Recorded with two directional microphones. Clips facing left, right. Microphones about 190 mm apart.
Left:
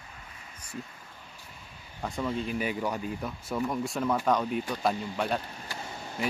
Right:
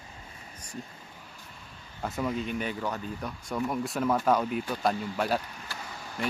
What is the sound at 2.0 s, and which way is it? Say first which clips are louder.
Speech: right 1 dB; 5° right (ahead or behind).